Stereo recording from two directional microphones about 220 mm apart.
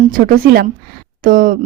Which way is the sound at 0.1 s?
40° right (ahead or behind).